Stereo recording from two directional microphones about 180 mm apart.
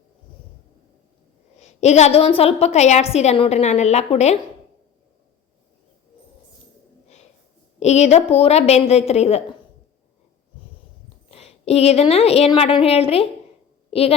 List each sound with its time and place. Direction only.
1.5 s a woman's voice: 40° left (ahead or behind)
7.8 s a woman's voice: 40° left (ahead or behind)
11.3 s a woman's voice: 35° left (ahead or behind)